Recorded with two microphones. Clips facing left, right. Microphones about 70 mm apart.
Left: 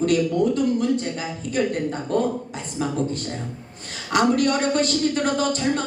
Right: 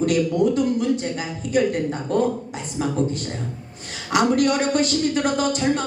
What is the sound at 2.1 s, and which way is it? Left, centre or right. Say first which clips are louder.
A woman's voice: right 2 dB; left.